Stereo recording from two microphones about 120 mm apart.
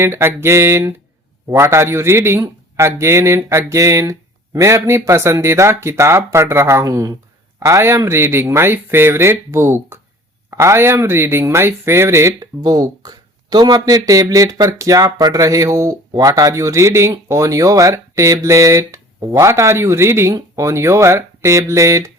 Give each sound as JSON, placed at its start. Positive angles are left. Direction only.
{"t": 0.0, "sound": "speech", "side_deg": -20}